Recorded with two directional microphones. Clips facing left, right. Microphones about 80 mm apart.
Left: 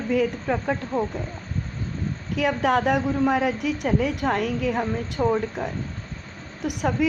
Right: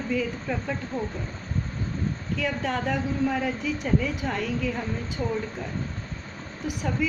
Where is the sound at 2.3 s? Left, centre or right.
Left.